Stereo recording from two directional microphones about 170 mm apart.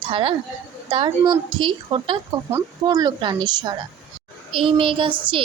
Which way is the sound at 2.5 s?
20° right (ahead or behind).